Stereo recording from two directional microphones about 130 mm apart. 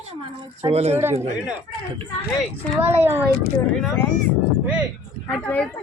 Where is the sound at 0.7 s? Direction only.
50° right (ahead or behind).